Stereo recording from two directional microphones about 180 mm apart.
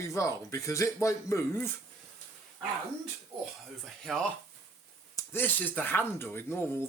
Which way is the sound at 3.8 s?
Centre (ahead or behind).